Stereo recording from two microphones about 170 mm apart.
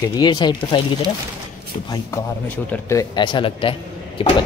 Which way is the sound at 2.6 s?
15° left (ahead or behind).